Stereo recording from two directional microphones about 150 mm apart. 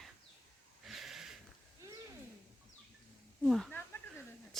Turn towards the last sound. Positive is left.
turn(degrees=0)  # may be behind; listen again after turning